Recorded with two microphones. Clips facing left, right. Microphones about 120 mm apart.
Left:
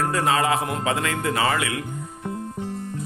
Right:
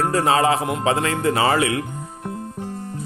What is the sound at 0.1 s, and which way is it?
Speech, 30° right (ahead or behind).